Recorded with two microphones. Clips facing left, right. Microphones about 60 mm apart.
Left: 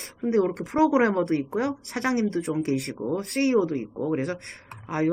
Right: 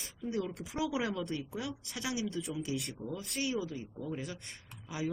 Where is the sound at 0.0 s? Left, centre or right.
Left.